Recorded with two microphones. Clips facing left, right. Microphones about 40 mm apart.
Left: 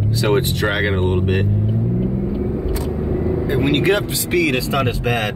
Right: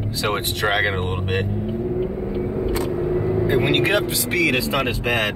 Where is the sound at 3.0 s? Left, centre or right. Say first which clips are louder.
Left 3 dB; centre.